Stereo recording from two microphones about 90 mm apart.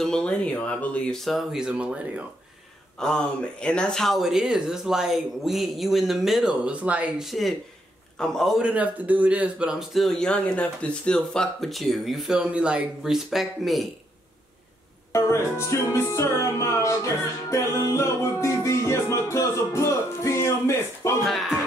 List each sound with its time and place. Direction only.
0.0 s speech: 10° left (ahead or behind)
1.2 s speech: centre (ahead or behind)
3.0 s a man's voice: 10° left (ahead or behind); by 7.2 s 15° right (ahead or behind)
7.2 s a man's voice: centre (ahead or behind)
8.6 s a man's voice: 15° right (ahead or behind)
15.1 s music: 35° left (ahead or behind)
21.2 s a man's voice: centre (ahead or behind)